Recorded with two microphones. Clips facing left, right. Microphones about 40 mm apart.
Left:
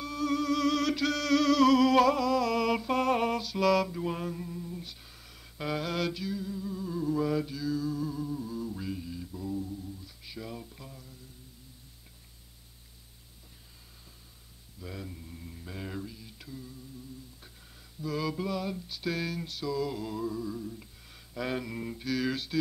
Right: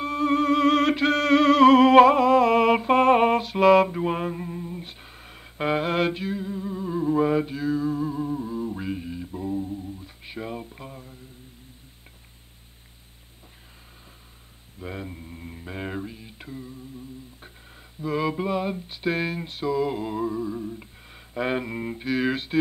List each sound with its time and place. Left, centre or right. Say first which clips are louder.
0.0 s music: right 8 dB; right
14.8 s mantra: right 7 dB; right
18.0 s a sound: right 7 dB; right